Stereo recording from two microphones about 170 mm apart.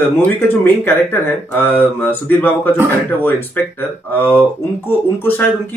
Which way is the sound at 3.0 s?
10° left (ahead or behind).